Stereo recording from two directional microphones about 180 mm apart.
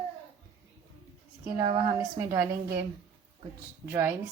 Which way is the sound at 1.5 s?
20° right (ahead or behind).